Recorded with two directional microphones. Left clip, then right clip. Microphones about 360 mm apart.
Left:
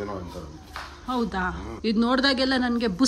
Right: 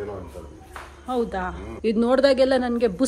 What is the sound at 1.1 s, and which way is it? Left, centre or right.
A woman's voice, centre.